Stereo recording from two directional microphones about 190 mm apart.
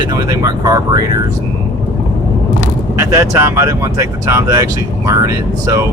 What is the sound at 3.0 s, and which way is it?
Speech, 15° right (ahead or behind).